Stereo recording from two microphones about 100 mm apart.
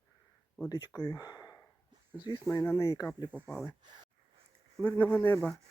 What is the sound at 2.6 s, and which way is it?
Speech, 30° left (ahead or behind).